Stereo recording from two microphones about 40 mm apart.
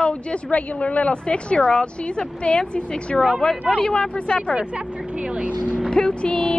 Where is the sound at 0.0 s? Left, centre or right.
Left.